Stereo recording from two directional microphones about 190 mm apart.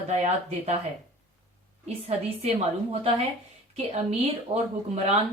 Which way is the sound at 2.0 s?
30° right (ahead or behind).